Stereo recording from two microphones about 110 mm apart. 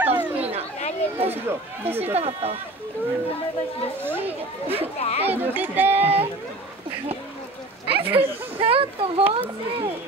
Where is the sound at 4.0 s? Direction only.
20° right (ahead or behind).